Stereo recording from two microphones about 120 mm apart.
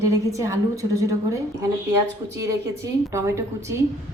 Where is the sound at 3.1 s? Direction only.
25° right (ahead or behind).